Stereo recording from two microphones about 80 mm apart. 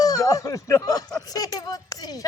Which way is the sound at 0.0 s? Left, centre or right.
Left.